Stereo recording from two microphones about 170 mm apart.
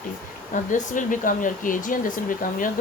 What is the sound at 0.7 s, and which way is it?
Speech, 50° left (ahead or behind).